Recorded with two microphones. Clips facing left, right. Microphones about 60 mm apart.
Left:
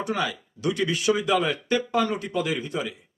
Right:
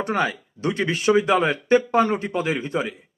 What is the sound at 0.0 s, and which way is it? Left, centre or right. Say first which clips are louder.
Speech: right 4 dB; right.